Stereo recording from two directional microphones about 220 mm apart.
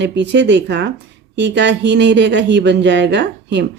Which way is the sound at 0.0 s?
50° right (ahead or behind).